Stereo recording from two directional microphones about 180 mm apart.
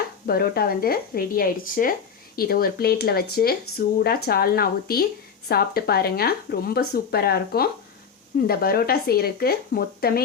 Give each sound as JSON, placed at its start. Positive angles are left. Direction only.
{"t": 0.3, "sound": "speech", "side_deg": 55}